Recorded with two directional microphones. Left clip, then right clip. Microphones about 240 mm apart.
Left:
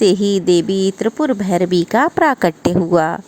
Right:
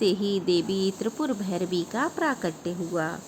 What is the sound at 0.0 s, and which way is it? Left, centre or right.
A woman's voice, left.